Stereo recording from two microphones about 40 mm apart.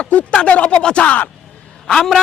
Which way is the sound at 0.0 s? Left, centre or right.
Left.